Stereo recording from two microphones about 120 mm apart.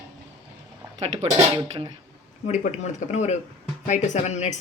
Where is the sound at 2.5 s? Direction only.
75° left (ahead or behind).